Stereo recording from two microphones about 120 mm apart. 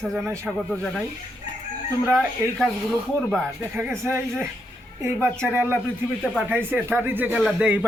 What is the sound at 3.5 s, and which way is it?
Speech, 20° right (ahead or behind).